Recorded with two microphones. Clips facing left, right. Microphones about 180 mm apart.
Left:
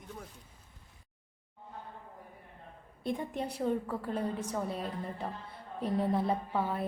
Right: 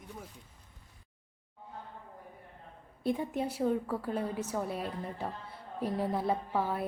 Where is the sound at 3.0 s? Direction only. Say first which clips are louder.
Right 3 dB; 5° right (ahead or behind).